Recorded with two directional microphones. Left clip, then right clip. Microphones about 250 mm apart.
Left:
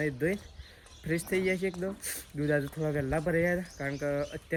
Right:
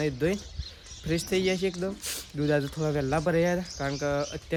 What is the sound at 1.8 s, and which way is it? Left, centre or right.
Speech, centre.